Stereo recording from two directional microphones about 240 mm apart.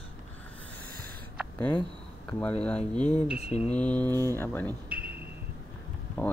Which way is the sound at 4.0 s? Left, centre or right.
Centre.